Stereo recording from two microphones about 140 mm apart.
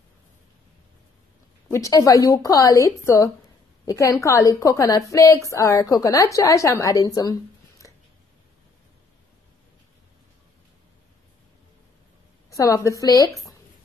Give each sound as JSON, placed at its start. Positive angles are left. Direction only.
{"t": 1.7, "sound": "a woman's voice", "side_deg": 25}
{"t": 12.4, "sound": "a woman's voice", "side_deg": 25}